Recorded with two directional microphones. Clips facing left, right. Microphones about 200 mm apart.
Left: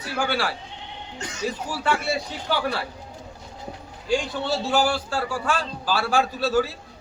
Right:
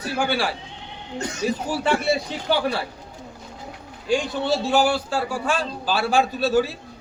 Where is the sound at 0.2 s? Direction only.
15° right (ahead or behind).